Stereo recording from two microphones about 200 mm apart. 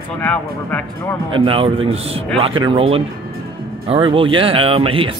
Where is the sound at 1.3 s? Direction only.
25° right (ahead or behind).